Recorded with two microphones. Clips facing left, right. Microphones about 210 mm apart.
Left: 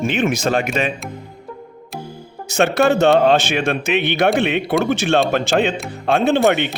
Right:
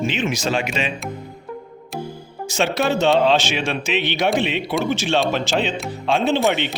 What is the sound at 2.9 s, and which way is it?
Speech, 65° left (ahead or behind).